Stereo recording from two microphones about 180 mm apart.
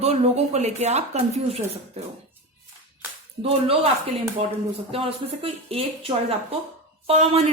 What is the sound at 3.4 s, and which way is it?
Speech, 35° right (ahead or behind).